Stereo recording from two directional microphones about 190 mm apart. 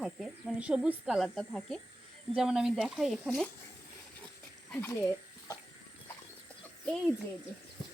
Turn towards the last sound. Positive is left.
turn(degrees=0)  # may be behind; listen again after turning